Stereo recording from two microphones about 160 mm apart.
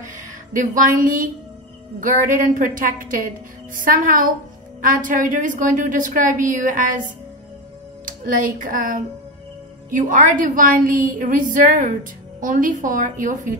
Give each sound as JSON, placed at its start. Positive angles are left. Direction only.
{"t": 0.0, "sound": "a woman's voice", "side_deg": -55}